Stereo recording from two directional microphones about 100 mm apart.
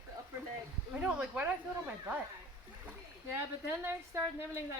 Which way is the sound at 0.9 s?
15° right (ahead or behind).